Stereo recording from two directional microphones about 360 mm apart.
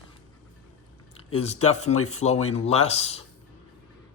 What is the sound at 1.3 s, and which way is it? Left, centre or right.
Speech, centre.